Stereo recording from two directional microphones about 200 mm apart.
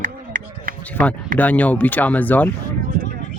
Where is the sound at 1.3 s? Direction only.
10° left (ahead or behind).